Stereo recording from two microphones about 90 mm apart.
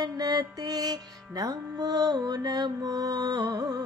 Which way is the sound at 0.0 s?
45° right (ahead or behind).